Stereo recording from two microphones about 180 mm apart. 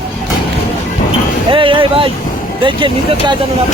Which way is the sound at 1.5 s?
30° right (ahead or behind).